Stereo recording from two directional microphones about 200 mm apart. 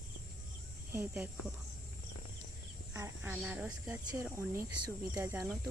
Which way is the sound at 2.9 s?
10° right (ahead or behind).